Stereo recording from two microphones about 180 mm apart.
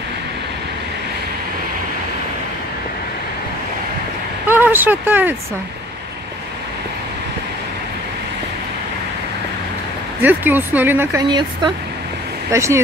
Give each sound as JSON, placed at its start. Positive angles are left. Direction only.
{"t": 4.5, "sound": "speech", "side_deg": -10}
{"t": 10.2, "sound": "speech", "side_deg": -10}
{"t": 11.2, "sound": "speech", "side_deg": -25}